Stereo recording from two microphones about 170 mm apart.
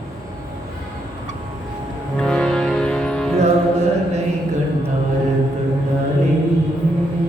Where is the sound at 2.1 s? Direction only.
5° left (ahead or behind).